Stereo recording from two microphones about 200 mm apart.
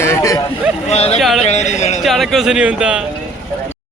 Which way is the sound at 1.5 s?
35° left (ahead or behind).